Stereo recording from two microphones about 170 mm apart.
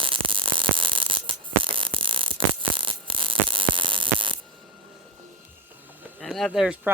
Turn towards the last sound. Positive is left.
turn(degrees=-5)  # may be behind; listen again after turning